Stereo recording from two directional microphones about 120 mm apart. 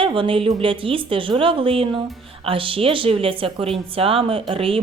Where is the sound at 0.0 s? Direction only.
45° right (ahead or behind).